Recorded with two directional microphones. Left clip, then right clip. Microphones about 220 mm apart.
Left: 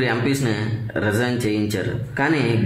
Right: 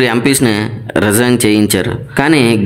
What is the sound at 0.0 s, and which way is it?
Speech, 45° right (ahead or behind).